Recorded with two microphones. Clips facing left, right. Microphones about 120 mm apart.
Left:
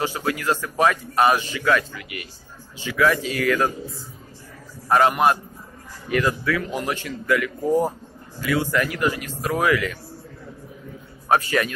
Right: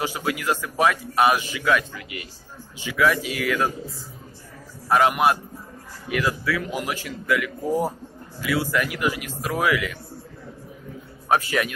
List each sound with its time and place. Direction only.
0.0 s a man's voice: 10° right (ahead or behind)
2.0 s a man's voice: 25° right (ahead or behind)
2.8 s a man's voice: 10° right (ahead or behind)
4.8 s a man's voice: 5° right (ahead or behind)